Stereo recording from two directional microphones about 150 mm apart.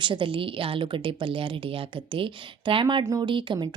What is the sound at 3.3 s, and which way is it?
Speech, 35° right (ahead or behind).